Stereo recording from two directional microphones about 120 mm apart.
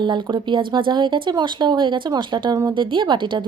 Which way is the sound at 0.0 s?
40° right (ahead or behind).